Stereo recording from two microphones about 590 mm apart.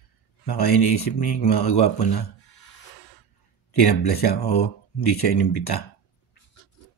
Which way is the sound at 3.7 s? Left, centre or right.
Left.